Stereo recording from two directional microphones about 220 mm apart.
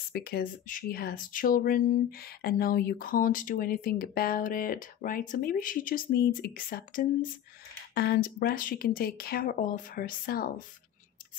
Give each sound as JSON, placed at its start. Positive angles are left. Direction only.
{"t": 0.1, "sound": "speech", "side_deg": 45}